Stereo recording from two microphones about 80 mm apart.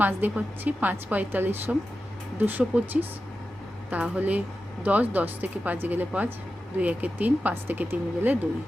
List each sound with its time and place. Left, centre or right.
0.0 s a woman's voice: right